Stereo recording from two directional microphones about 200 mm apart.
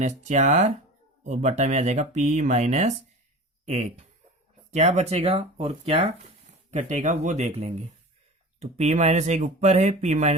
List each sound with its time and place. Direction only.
0.0 s speech: 35° right (ahead or behind)